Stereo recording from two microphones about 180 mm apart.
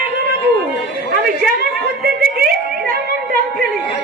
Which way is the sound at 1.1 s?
55° right (ahead or behind).